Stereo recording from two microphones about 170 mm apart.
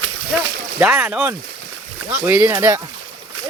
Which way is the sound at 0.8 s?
5° right (ahead or behind).